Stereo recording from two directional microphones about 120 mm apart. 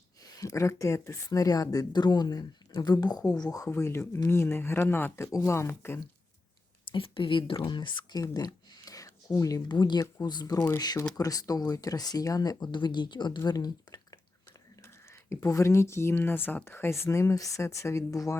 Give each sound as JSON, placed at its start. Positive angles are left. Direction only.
{"t": 0.3, "sound": "speech", "side_deg": 25}
{"t": 6.9, "sound": "speech", "side_deg": 45}
{"t": 8.7, "sound": "a sound", "side_deg": 30}
{"t": 10.2, "sound": "speech", "side_deg": 35}